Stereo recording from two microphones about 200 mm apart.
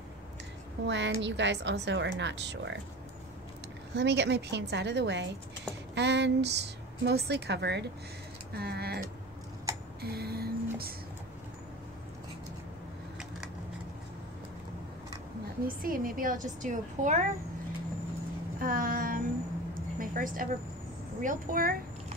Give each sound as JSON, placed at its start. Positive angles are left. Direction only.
{"t": 0.8, "sound": "a woman's voice", "side_deg": -65}
{"t": 3.9, "sound": "a woman's voice", "side_deg": -60}
{"t": 10.0, "sound": "music", "side_deg": -50}
{"t": 15.6, "sound": "a woman's voice", "side_deg": -45}
{"t": 18.6, "sound": "a sound", "side_deg": -45}
{"t": 21.2, "sound": "a woman's voice", "side_deg": -45}